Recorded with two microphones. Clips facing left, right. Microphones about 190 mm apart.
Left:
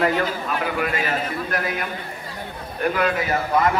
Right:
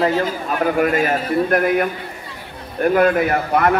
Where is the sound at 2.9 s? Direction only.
50° right (ahead or behind).